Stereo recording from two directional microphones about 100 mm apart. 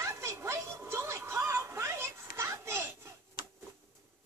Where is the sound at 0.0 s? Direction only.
30° right (ahead or behind).